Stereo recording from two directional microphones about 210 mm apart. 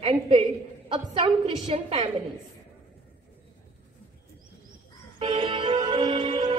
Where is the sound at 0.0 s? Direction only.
25° right (ahead or behind).